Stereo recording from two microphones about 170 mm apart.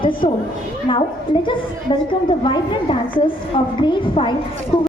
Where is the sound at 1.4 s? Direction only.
30° left (ahead or behind).